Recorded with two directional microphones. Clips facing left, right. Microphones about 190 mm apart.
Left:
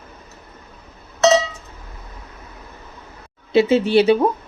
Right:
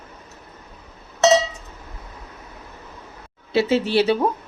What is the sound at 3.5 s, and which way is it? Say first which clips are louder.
Speech: left 4 dB; 20° left (ahead or behind).